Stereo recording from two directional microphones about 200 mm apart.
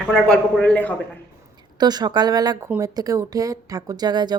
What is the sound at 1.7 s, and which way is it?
Speech, 20° right (ahead or behind).